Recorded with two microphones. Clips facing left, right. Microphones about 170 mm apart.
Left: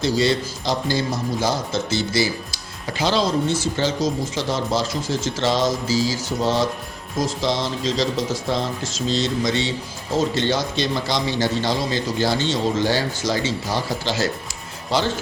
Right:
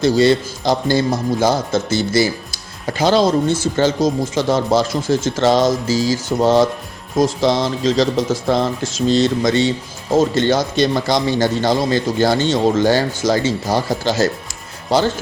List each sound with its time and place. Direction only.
0.0 s speech: 55° right (ahead or behind)